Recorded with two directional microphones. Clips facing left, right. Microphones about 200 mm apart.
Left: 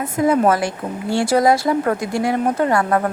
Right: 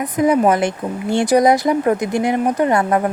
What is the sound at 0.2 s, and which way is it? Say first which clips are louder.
Speech: right 2 dB; 15° right (ahead or behind).